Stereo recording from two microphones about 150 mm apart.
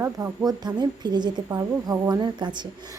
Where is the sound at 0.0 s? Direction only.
20° right (ahead or behind).